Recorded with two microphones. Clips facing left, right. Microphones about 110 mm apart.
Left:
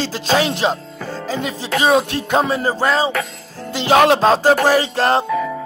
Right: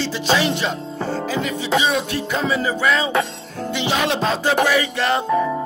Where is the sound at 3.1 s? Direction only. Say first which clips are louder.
Right 2 dB; 30° right (ahead or behind).